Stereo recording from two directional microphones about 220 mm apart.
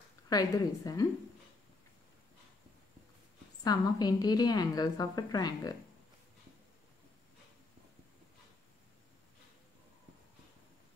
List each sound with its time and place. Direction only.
0.3 s a woman's voice: 15° left (ahead or behind)
3.6 s a woman's voice: 15° left (ahead or behind)